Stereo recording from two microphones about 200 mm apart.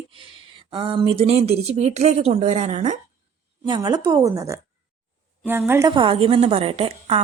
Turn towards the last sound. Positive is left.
turn(degrees=-30)  # may be behind; listen again after turning